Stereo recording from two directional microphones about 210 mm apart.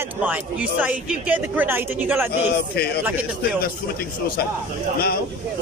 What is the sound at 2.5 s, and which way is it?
Speech, 50° left (ahead or behind).